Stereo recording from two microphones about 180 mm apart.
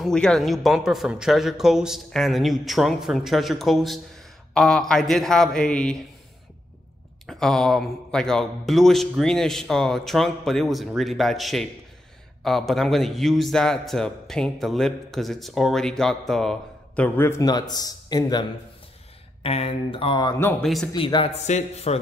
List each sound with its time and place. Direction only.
0.0 s a man's voice: 5° left (ahead or behind)
7.2 s a man's voice: centre (ahead or behind); by 18.5 s 20° left (ahead or behind)
19.4 s speech: 35° left (ahead or behind); by 20.5 s 20° left (ahead or behind)
20.6 s a man's voice: centre (ahead or behind)
20.9 s speech: 25° left (ahead or behind)